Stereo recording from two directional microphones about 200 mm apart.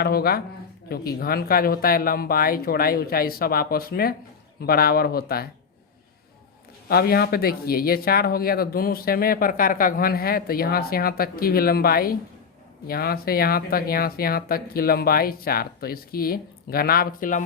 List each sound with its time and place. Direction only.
0.0 s speech: 50° left (ahead or behind)
6.8 s speech: 50° left (ahead or behind)